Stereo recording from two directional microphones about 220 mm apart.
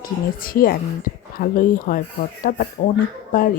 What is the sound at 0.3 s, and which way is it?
Speech, 40° left (ahead or behind).